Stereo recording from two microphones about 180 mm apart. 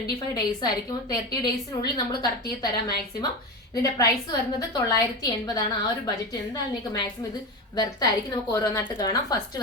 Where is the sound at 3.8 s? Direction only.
20° left (ahead or behind).